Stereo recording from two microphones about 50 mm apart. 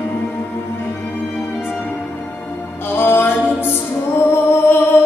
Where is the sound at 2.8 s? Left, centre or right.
Left.